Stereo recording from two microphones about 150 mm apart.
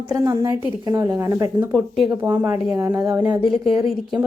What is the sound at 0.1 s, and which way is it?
A woman's voice, 25° right (ahead or behind).